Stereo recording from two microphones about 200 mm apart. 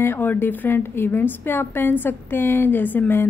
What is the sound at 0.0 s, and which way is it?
Speech, 10° left (ahead or behind).